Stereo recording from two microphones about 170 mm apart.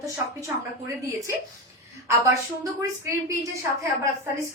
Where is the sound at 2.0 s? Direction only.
15° right (ahead or behind).